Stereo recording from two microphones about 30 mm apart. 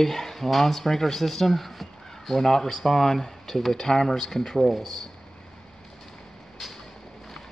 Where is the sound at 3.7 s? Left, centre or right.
Centre.